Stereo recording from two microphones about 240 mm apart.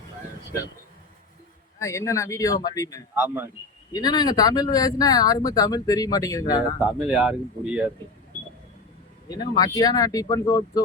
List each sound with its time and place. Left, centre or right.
1.8 s speech: centre
3.2 s a man's voice: centre
3.9 s speech: centre
6.7 s speech: centre
9.3 s speech: centre